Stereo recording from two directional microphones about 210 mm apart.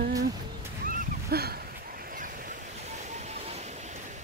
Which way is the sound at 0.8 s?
50° right (ahead or behind).